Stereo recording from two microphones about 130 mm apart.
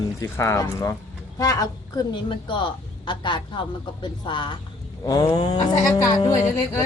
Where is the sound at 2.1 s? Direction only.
40° left (ahead or behind).